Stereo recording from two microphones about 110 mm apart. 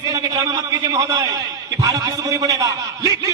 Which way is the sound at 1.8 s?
35° right (ahead or behind).